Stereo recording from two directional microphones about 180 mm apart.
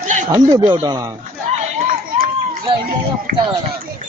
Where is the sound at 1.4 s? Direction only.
50° right (ahead or behind).